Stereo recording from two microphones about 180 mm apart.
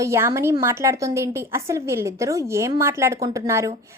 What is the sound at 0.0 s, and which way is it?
A woman's voice, 15° right (ahead or behind).